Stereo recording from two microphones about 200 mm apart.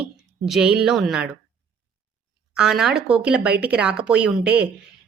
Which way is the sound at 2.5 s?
5° right (ahead or behind).